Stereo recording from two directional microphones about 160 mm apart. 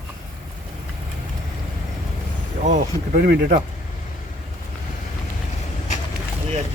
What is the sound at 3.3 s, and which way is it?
Speech, 60° right (ahead or behind).